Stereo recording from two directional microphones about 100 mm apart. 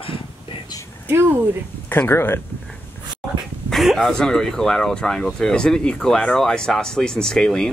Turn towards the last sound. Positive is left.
turn(degrees=5)  # may be behind; listen again after turning